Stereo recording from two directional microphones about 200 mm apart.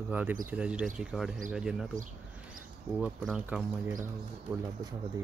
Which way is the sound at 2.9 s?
5° right (ahead or behind).